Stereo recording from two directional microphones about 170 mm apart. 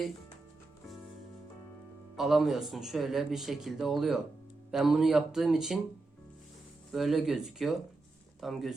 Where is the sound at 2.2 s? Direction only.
Centre (ahead or behind).